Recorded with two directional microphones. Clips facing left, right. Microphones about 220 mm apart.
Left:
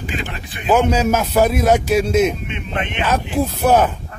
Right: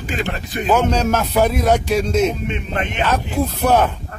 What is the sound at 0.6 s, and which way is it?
Speech, 10° left (ahead or behind).